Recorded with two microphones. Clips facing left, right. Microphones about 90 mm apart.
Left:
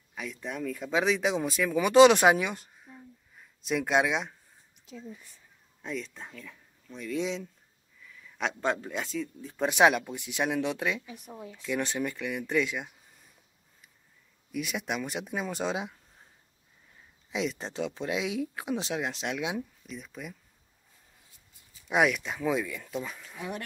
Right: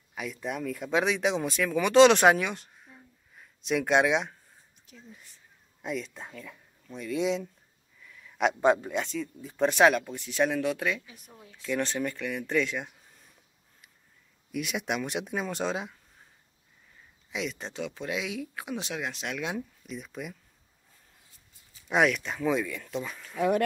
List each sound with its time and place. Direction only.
0.1 s speech: 5° right (ahead or behind)
5.8 s a man's voice: 10° right (ahead or behind)
8.9 s speech: centre (ahead or behind)
9.7 s speech: 15° left (ahead or behind)
14.5 s speech: centre (ahead or behind)
17.3 s speech: 25° left (ahead or behind)
19.9 s a man's voice: 5° right (ahead or behind)
21.8 s speech: 5° left (ahead or behind)
23.3 s speech: 65° right (ahead or behind)